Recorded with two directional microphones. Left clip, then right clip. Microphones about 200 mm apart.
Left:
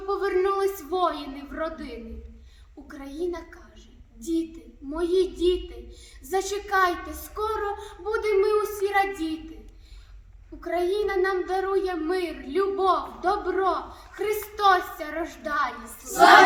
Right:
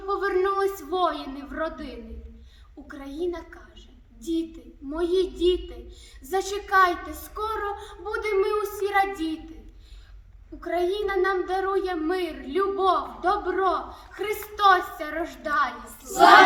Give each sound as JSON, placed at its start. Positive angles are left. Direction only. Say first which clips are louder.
{"t": 0.1, "sound": "a sound", "louder": "even", "side_deg": 0}
{"t": 2.8, "sound": "speech", "louder": "right 1 dB", "side_deg": 0}
{"t": 10.6, "sound": "speech", "louder": "even", "side_deg": 0}